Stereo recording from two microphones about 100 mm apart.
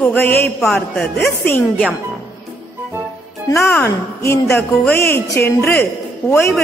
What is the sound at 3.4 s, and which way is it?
A woman's voice, 30° left (ahead or behind).